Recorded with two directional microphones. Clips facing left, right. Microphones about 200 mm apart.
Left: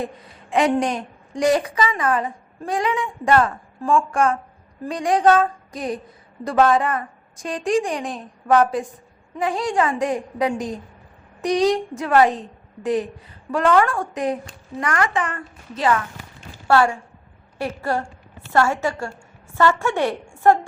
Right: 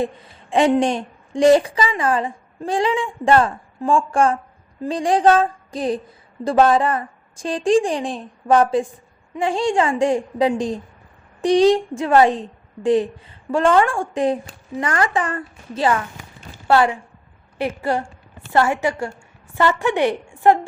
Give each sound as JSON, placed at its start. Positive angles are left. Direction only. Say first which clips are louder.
{"t": 0.5, "sound": "a woman's voice", "louder": "right 3 dB", "side_deg": -25}
{"t": 16.6, "sound": "a woman's voice", "louder": "right 1 dB", "side_deg": -20}